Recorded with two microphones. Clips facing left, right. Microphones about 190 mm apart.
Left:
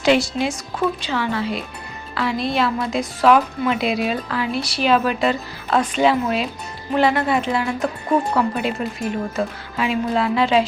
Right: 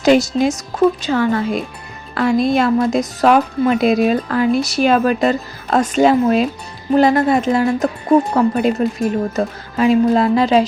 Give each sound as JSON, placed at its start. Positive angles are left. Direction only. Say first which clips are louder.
{"t": 0.0, "sound": "a woman's voice", "louder": "right 5 dB", "side_deg": -45}